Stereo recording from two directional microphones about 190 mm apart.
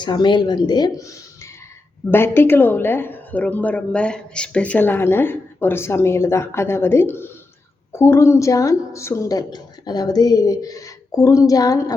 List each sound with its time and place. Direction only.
0.0 s a woman's voice: 25° left (ahead or behind)